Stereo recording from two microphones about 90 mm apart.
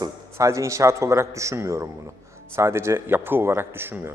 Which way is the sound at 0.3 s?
35° right (ahead or behind).